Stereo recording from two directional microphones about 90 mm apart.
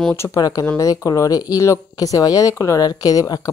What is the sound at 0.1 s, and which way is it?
Speech, 35° left (ahead or behind).